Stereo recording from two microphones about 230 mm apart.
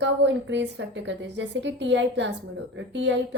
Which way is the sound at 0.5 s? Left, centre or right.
Right.